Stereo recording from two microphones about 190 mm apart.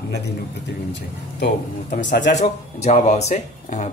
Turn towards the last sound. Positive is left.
turn(degrees=35)  # may be behind; listen again after turning